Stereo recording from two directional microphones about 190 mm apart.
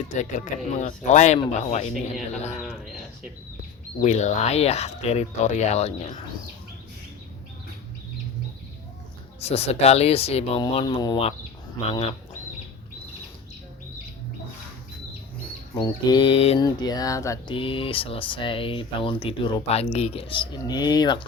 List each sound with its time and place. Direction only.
0.1 s speech: 40° left (ahead or behind)
2.6 s speech: centre (ahead or behind)
4.0 s speech: 40° left (ahead or behind)
9.4 s speech: 35° left (ahead or behind)
15.7 s speech: 20° left (ahead or behind)
16.6 s speech: 20° left (ahead or behind)